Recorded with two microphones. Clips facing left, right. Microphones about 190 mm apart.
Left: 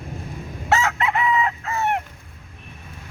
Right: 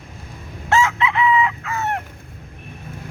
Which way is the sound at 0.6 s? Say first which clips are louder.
Right 2 dB; 60° left (ahead or behind).